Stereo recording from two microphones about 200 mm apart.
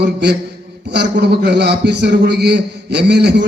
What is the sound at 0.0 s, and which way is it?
A man's voice, 55° right (ahead or behind).